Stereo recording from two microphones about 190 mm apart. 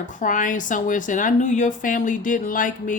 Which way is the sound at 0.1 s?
40° left (ahead or behind).